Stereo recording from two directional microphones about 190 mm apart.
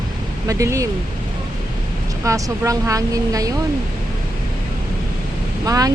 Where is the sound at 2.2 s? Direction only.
15° right (ahead or behind).